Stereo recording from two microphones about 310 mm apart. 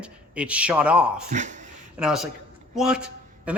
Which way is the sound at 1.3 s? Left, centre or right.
Right.